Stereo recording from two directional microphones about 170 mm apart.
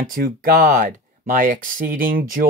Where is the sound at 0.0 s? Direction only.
55° right (ahead or behind).